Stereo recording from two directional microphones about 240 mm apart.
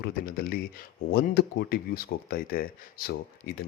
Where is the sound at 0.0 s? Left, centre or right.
Left.